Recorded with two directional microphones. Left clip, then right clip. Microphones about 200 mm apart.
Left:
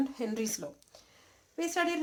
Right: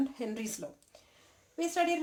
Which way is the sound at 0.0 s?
25° left (ahead or behind).